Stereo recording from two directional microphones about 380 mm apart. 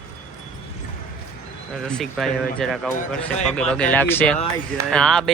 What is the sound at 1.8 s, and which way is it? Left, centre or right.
Speech, centre.